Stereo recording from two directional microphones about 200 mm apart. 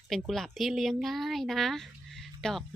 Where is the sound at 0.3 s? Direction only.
Centre (ahead or behind).